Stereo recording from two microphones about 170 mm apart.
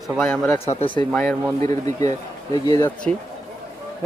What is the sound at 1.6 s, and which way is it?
Speech, 20° left (ahead or behind).